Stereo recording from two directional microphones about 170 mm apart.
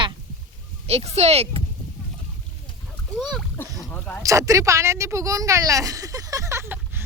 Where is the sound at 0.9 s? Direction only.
40° right (ahead or behind).